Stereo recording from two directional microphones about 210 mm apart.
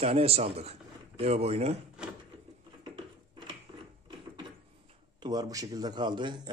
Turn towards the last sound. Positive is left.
turn(degrees=-20)  # may be behind; listen again after turning